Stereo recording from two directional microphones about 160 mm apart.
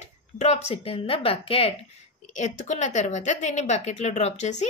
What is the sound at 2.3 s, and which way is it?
A woman's voice, 50° left (ahead or behind).